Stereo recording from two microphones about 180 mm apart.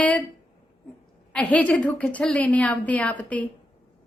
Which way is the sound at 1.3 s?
5° left (ahead or behind).